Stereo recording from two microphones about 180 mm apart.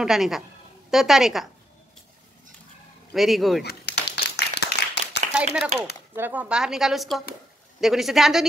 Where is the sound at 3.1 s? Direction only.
Centre (ahead or behind).